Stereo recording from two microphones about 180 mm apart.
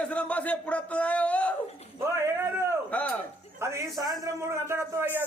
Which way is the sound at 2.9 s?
10° left (ahead or behind).